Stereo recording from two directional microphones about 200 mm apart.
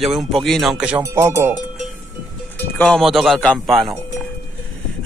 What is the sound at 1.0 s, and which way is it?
Speech, 15° right (ahead or behind).